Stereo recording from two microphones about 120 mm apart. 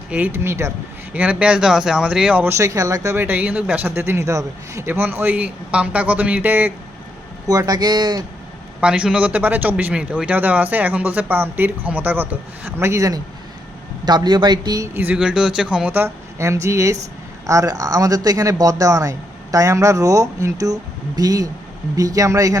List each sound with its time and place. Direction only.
0.1 s speech: 15° right (ahead or behind)
1.1 s speech: 10° right (ahead or behind)
7.4 s speech: 30° right (ahead or behind)
8.8 s speech: 10° right (ahead or behind); by 13.1 s 25° right (ahead or behind)
14.0 s speech: 35° right (ahead or behind)
14.9 s speech: 10° right (ahead or behind)
15.9 s speech: 20° right (ahead or behind)